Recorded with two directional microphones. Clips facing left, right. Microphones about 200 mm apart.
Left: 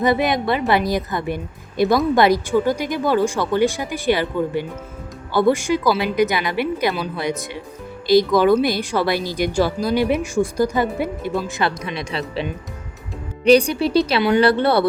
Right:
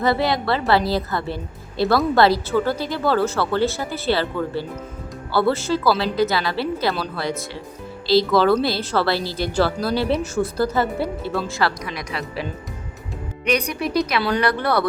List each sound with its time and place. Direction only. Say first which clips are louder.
0.0 s a woman's voice: left 2 dB; 20° left (ahead or behind)